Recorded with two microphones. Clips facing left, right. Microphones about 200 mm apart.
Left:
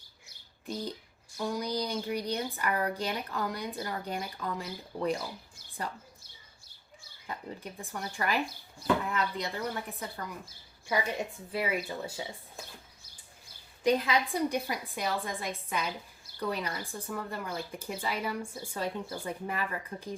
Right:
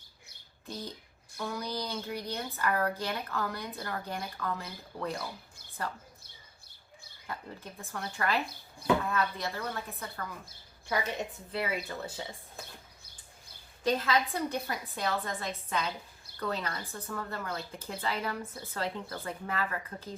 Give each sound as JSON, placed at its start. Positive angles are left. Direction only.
{"t": 0.7, "sound": "a woman's voice", "side_deg": 15}
{"t": 7.3, "sound": "a woman's voice", "side_deg": 15}
{"t": 11.5, "sound": "a woman's voice", "side_deg": 10}
{"t": 13.8, "sound": "a woman's voice", "side_deg": 15}